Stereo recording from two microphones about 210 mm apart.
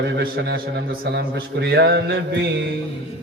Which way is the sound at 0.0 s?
50° right (ahead or behind).